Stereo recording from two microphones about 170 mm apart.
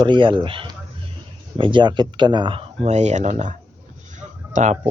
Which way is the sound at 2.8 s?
45° right (ahead or behind).